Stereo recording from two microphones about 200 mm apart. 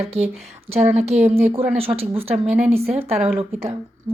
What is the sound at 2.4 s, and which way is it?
Speech, 5° right (ahead or behind).